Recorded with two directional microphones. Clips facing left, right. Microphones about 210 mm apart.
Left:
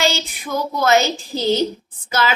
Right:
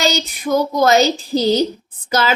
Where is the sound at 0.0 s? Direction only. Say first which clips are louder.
Right 2 dB; 40° right (ahead or behind).